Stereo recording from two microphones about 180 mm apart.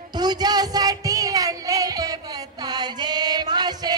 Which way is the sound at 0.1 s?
20° right (ahead or behind).